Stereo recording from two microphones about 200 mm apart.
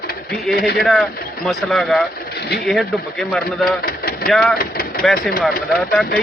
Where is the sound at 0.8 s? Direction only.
Centre (ahead or behind).